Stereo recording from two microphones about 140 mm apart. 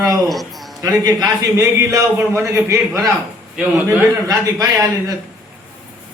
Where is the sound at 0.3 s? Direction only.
Centre (ahead or behind).